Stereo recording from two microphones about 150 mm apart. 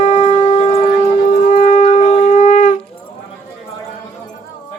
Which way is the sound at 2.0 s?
40° left (ahead or behind).